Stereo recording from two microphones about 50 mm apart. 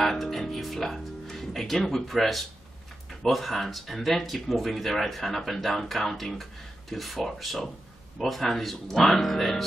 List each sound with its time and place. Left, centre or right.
0.0 s speech: centre